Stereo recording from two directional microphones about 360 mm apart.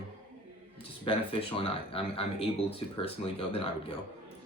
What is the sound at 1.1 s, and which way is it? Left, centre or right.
Speech, centre.